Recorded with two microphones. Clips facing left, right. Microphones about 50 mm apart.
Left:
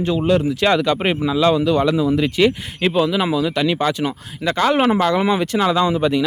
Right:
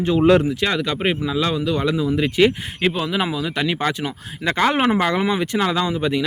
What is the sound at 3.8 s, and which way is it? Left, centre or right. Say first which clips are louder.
Speech: left 3 dB; centre.